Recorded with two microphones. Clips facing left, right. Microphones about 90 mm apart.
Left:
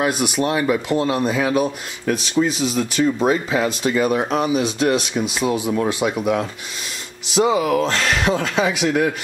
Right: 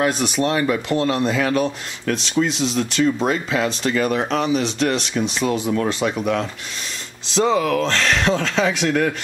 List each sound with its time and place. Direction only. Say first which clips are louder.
0.0 s speech: even; 10° left (ahead or behind)